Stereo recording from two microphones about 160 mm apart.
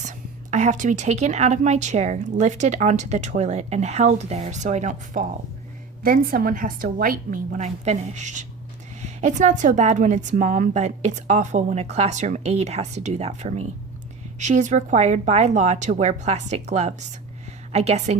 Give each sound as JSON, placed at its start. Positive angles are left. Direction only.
{"t": 0.0, "sound": "a woman's voice", "side_deg": -50}
{"t": 6.0, "sound": "a woman's voice", "side_deg": -65}